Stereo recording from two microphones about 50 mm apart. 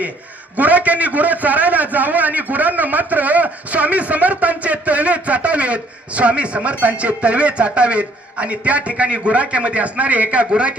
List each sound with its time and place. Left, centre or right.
0.5 s a man's voice: right